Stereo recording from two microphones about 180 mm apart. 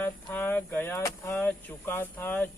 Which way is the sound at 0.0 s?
10° left (ahead or behind).